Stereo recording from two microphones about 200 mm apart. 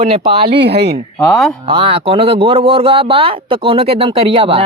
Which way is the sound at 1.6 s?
25° right (ahead or behind).